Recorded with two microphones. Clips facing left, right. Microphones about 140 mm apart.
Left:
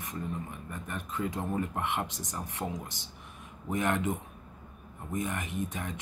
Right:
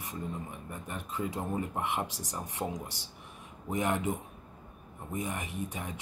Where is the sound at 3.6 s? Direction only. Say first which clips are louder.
Left 1 dB; 15° right (ahead or behind).